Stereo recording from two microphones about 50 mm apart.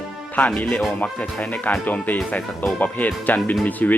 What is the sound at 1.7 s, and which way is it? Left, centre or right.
Speech, left.